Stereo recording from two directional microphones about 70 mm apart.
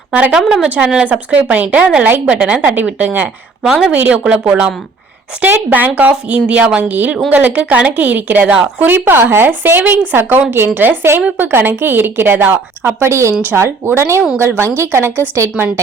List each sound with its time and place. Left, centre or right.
0.1 s speech: centre
0.3 s speech: centre
1.0 s a woman's voice: right
3.6 s a woman's voice: centre
3.9 s a woman's voice: right
5.4 s a woman's voice: right